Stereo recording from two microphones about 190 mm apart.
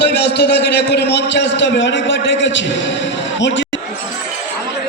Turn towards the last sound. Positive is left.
turn(degrees=70)  # may be behind; listen again after turning